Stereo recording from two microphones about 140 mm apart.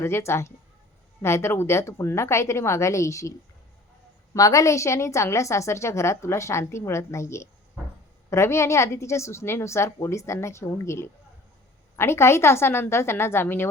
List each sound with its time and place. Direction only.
0.0 s a woman's voice: 20° left (ahead or behind)
4.4 s a woman's voice: 25° left (ahead or behind)